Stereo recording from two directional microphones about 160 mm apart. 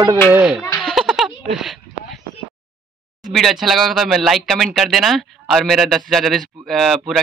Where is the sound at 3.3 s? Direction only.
Centre (ahead or behind).